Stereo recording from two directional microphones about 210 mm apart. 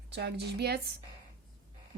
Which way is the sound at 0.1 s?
50° right (ahead or behind).